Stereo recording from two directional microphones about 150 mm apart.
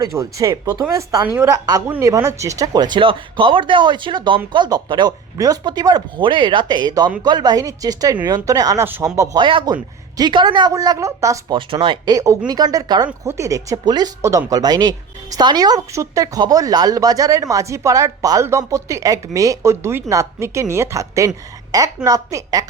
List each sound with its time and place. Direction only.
0.0 s speech: 20° right (ahead or behind)
9.4 s speech: 35° right (ahead or behind)
11.5 s speech: 35° right (ahead or behind)
13.1 s speech: 15° right (ahead or behind)